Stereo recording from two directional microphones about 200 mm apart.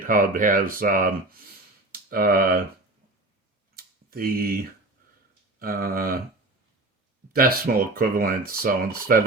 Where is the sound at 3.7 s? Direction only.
45° right (ahead or behind).